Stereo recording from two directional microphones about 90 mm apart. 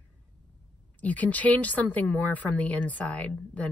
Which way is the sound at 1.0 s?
15° left (ahead or behind).